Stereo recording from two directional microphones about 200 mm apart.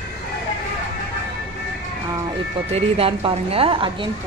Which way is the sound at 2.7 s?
30° right (ahead or behind).